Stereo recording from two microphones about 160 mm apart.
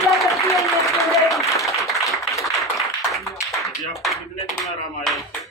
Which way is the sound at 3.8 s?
20° left (ahead or behind).